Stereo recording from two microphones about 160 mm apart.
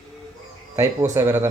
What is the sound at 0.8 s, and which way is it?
Speech, 20° right (ahead or behind).